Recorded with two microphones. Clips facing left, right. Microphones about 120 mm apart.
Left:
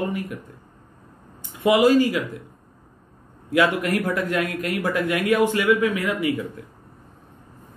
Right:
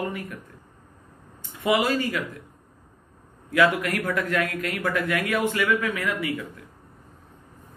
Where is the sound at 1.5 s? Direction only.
15° left (ahead or behind).